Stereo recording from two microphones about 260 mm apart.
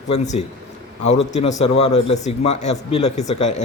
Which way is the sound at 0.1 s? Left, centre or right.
Left.